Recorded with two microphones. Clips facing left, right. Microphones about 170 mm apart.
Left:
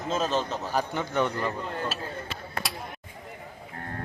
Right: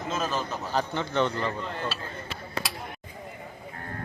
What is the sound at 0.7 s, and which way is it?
Speech, 10° left (ahead or behind).